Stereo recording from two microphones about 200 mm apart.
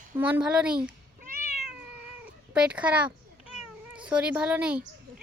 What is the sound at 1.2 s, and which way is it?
Cat, 45° right (ahead or behind).